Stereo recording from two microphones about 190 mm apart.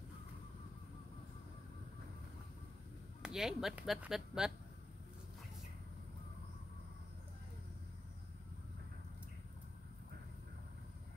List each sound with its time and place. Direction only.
3.2 s speech: centre (ahead or behind)